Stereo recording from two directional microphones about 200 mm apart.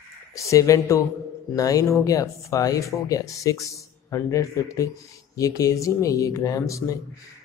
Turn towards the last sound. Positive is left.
turn(degrees=15)  # may be behind; listen again after turning